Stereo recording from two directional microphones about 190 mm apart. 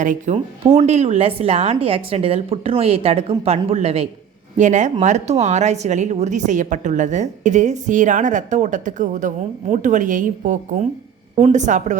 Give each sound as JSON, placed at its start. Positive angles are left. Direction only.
{"t": 0.0, "sound": "speech", "side_deg": -40}